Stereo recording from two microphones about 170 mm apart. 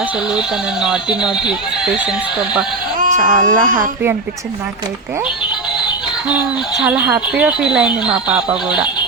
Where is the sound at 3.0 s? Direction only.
50° right (ahead or behind).